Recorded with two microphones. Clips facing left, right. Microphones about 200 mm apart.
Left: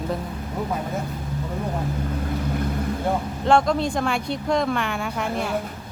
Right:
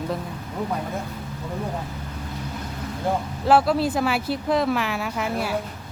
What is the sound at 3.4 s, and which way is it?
Speech, 5° right (ahead or behind).